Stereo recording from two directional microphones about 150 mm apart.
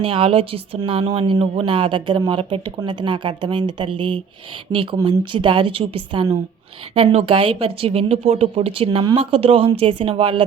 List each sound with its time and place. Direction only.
0.0 s speech: 35° right (ahead or behind)